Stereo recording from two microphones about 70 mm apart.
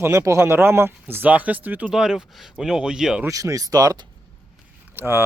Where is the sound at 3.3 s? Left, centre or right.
Right.